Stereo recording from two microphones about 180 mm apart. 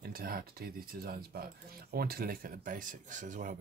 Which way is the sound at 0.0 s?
55° right (ahead or behind).